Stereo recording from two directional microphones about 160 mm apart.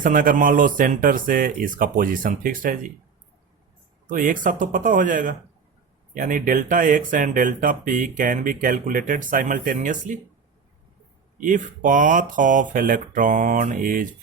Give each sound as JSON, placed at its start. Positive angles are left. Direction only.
{"t": 0.0, "sound": "speech", "side_deg": -60}
{"t": 4.0, "sound": "speech", "side_deg": -55}
{"t": 11.3, "sound": "speech", "side_deg": -55}